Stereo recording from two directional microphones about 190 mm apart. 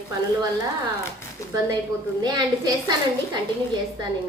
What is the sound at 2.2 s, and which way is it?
Speech, 20° right (ahead or behind).